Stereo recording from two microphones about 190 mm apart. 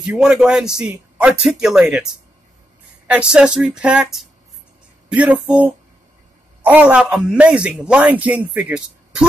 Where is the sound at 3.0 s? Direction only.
5° right (ahead or behind).